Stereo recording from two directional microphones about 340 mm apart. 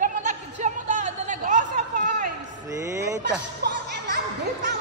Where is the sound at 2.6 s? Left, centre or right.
Centre.